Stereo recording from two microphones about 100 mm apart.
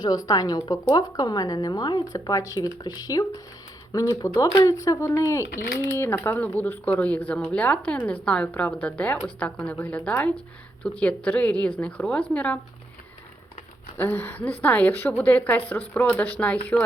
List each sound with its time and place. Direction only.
0.0 s a woman's voice: 40° left (ahead or behind); by 12.5 s 15° left (ahead or behind)
13.9 s a woman's voice: 20° left (ahead or behind)